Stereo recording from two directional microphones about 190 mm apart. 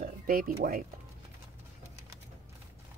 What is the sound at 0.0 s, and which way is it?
Speech, 45° right (ahead or behind).